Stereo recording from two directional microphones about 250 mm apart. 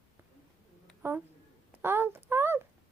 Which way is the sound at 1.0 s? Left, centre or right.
Centre.